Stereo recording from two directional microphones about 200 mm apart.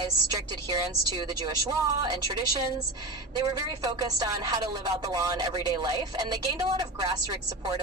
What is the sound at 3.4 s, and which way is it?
A woman's voice, 20° right (ahead or behind).